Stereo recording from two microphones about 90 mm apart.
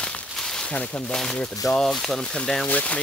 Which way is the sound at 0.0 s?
5° left (ahead or behind).